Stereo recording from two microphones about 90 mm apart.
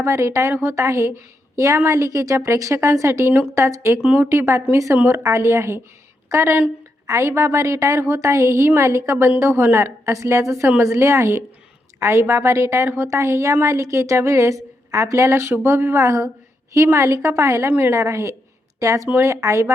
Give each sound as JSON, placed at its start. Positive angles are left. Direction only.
{"t": 0.0, "sound": "a woman's voice", "side_deg": -30}
{"t": 4.0, "sound": "speech", "side_deg": -15}
{"t": 4.3, "sound": "a woman's voice", "side_deg": -30}